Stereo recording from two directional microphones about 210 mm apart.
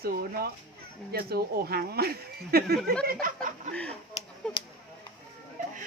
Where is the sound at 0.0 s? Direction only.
45° right (ahead or behind).